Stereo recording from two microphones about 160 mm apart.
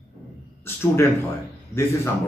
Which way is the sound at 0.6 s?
15° left (ahead or behind).